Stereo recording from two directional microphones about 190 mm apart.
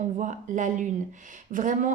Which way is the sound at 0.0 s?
40° right (ahead or behind).